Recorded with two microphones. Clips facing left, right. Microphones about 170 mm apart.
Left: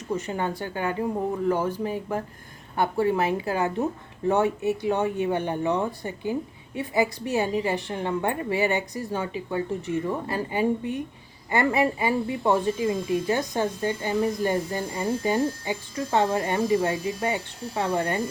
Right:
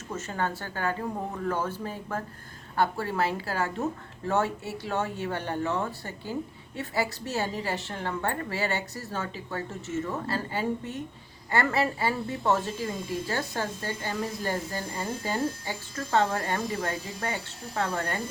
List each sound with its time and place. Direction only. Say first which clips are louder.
0.1 s speech: left 4 dB; 15° left (ahead or behind)